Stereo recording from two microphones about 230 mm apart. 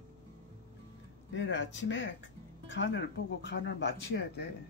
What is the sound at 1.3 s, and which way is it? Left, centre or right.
Speech, left.